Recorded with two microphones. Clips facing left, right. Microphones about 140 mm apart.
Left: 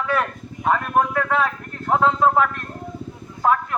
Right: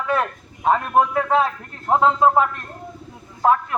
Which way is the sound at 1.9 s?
25° right (ahead or behind).